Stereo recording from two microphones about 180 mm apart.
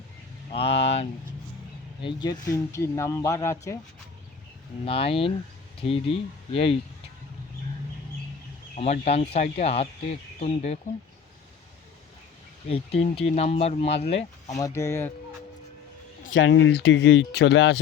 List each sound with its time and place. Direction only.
0.5 s speech: 35° left (ahead or behind)
2.0 s speech: 25° left (ahead or behind)
4.9 s speech: 30° left (ahead or behind)
8.7 s speech: 35° left (ahead or behind)
12.6 s speech: 35° left (ahead or behind)
14.5 s speech: 20° left (ahead or behind)
16.3 s speech: 90° left; by 17.7 s 75° left (ahead or behind)